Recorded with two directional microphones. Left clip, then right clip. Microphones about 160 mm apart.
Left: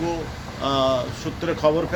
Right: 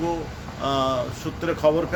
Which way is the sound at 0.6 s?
5° right (ahead or behind).